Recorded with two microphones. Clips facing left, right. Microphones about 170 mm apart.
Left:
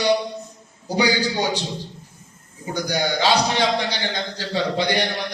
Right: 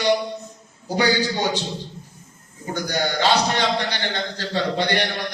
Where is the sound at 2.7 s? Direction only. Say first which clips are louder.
Left 1 dB; 10° left (ahead or behind).